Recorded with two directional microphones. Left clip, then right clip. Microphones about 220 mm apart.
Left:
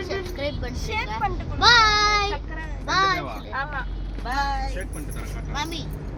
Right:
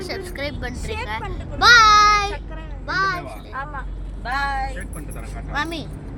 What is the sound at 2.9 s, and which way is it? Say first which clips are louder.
Speech: left 1 dB; 20° left (ahead or behind).